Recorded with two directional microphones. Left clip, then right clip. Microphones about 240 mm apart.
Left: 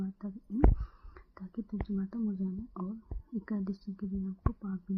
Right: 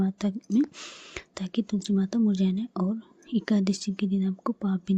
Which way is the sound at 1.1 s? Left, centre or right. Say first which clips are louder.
Right 12 dB; right.